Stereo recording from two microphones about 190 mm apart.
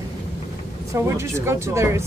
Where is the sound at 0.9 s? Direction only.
15° right (ahead or behind).